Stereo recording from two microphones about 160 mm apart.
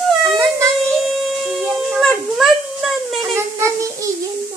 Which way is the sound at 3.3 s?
20° right (ahead or behind).